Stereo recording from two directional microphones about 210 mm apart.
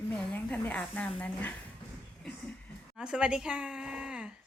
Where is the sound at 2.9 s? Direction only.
5° right (ahead or behind).